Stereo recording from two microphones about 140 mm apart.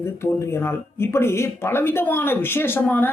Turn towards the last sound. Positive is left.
turn(degrees=15)  # may be behind; listen again after turning